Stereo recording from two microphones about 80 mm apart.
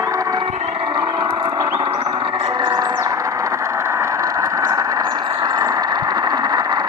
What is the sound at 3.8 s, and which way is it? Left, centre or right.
Vehicle, right.